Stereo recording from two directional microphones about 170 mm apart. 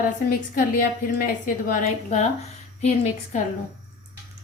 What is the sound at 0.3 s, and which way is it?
A woman's voice, 55° left (ahead or behind).